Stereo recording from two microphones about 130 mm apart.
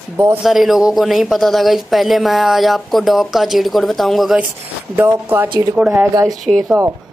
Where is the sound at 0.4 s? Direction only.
Centre (ahead or behind).